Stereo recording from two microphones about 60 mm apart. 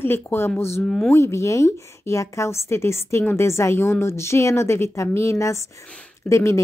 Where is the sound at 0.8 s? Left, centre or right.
Centre.